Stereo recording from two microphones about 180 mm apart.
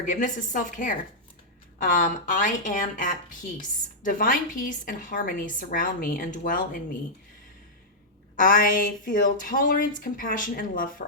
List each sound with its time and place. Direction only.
0.0 s a woman's voice: 45° left (ahead or behind)
8.4 s a woman's voice: 50° left (ahead or behind)